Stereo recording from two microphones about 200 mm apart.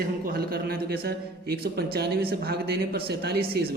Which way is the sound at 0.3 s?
45° right (ahead or behind).